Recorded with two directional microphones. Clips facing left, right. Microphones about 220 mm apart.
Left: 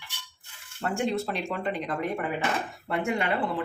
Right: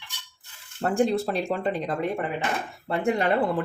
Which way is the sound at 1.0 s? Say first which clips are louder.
Right 6 dB; 35° right (ahead or behind).